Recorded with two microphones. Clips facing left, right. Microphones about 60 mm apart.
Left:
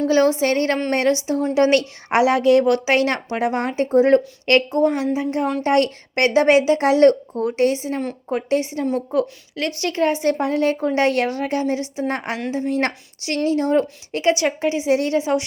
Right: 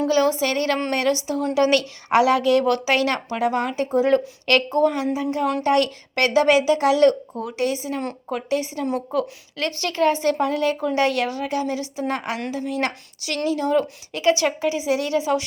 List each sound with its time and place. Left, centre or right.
0.1 s a woman's voice: left
9.1 s a woman's voice: left